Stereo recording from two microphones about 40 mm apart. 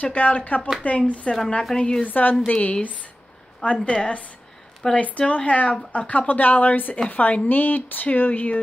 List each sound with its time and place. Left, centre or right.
0.0 s speech: left
1.8 s a woman's voice: centre
2.0 s speech: left
2.5 s a woman's voice: left